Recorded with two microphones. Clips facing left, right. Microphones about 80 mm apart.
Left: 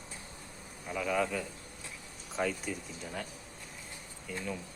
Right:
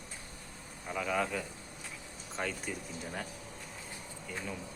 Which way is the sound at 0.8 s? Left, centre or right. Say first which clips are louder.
Left 1 dB; centre.